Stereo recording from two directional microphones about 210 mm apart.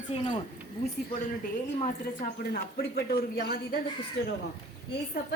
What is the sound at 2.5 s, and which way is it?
Speech, 45° left (ahead or behind).